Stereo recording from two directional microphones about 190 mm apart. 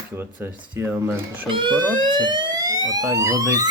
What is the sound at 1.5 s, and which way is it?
Siren, 25° right (ahead or behind).